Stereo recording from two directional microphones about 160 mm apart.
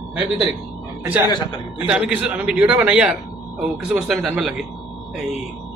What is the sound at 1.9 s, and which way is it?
A man's voice, 5° right (ahead or behind).